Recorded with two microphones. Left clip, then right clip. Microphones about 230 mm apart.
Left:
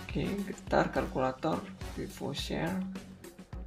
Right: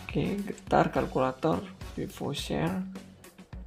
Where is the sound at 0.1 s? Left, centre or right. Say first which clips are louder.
Right 4 dB; right.